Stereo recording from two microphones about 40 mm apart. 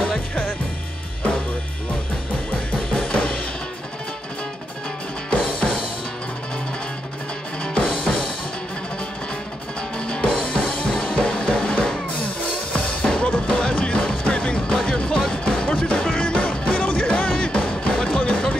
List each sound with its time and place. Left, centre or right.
2.7 s music: left
5.3 s music: left
7.6 s music: left
9.9 s music: left